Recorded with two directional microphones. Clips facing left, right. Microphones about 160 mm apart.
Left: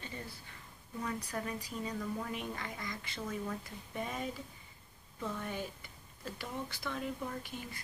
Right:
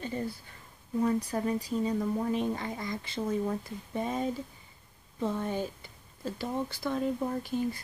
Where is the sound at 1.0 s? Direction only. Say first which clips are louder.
Right 10 dB; 30° right (ahead or behind).